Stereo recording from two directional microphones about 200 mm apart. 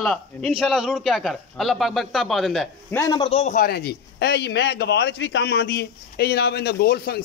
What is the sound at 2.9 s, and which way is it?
A man's voice, 20° left (ahead or behind).